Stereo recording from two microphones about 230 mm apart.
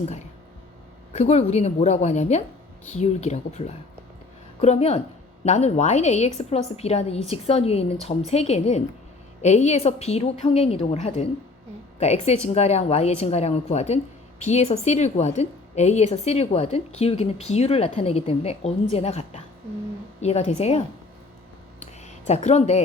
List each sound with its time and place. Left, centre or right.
1.1 s a woman's voice: left
4.6 s a woman's voice: left
22.0 s speech: left